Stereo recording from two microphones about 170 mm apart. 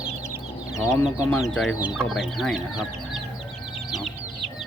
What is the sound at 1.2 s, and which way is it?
Speech, 15° left (ahead or behind).